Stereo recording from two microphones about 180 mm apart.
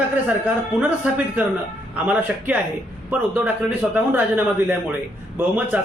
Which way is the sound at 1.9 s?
10° right (ahead or behind).